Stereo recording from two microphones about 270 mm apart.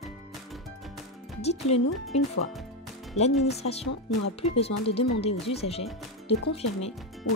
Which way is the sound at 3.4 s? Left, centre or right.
Left.